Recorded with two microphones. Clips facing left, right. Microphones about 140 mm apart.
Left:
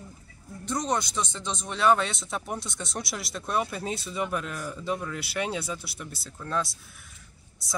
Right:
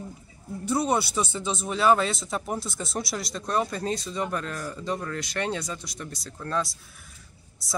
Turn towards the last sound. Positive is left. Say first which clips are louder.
# right 1 dB
turn(degrees=0)  # may be behind; listen again after turning